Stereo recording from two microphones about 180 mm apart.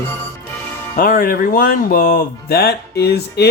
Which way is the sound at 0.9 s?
55° left (ahead or behind).